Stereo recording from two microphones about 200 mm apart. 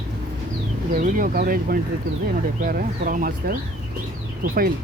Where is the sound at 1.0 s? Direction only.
45° right (ahead or behind).